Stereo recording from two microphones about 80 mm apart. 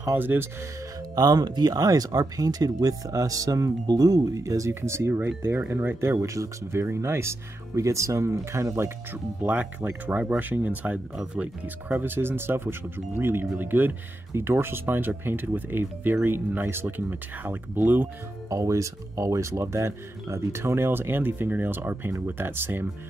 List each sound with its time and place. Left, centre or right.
0.0 s speech: right
1.1 s speech: right
18.5 s speech: right